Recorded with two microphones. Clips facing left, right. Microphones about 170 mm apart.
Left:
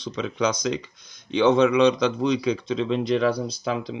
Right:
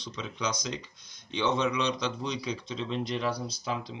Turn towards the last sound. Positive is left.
turn(degrees=90)